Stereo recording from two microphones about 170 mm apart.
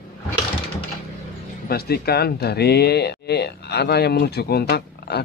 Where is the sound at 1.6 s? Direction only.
65° left (ahead or behind).